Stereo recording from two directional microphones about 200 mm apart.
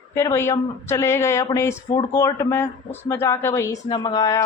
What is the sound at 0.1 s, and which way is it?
Speech, 15° left (ahead or behind).